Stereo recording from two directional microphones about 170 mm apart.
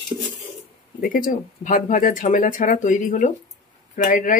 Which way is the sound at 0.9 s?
55° left (ahead or behind).